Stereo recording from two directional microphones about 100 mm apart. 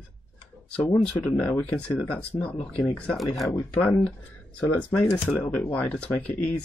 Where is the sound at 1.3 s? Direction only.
15° left (ahead or behind).